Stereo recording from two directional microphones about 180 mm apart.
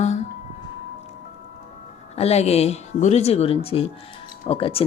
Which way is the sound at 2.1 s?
35° left (ahead or behind).